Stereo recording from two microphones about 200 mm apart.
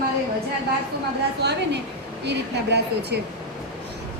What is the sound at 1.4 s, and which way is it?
A woman's voice, 55° right (ahead or behind).